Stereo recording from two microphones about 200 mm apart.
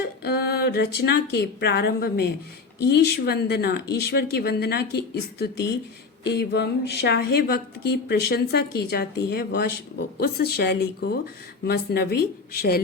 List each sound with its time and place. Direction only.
0.0 s speech: 55° left (ahead or behind)